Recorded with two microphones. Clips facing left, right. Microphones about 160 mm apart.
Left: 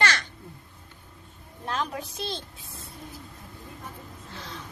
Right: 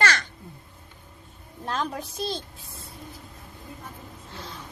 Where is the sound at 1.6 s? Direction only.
35° right (ahead or behind).